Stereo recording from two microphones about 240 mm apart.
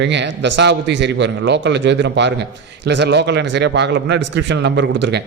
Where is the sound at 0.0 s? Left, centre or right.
Right.